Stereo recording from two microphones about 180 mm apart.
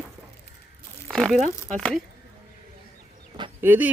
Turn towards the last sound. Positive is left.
turn(degrees=-10)  # may be behind; listen again after turning